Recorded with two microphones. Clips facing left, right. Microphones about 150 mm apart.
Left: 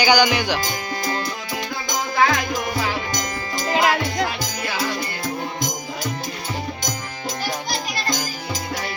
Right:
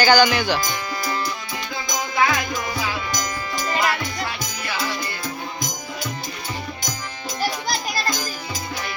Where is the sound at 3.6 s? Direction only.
75° left (ahead or behind).